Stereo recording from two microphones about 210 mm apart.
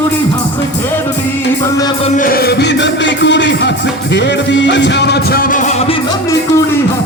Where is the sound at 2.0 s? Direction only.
40° left (ahead or behind).